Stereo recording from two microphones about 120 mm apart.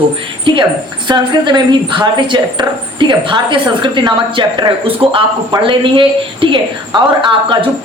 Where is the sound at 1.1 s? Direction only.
40° right (ahead or behind).